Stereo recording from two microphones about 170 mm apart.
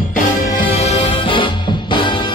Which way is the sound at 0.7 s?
40° left (ahead or behind).